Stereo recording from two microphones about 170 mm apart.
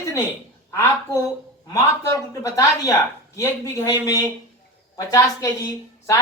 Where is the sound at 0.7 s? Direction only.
15° left (ahead or behind).